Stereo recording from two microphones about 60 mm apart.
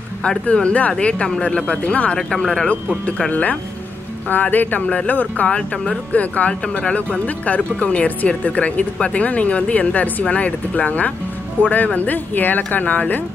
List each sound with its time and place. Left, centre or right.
0.5 s speech: left
2.1 s speech: centre
2.7 s speech: left